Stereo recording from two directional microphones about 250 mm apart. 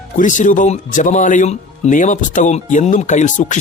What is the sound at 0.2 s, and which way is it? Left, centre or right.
Speech, left.